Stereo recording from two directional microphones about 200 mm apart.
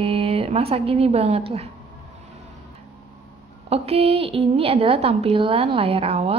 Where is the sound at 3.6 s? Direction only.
30° right (ahead or behind).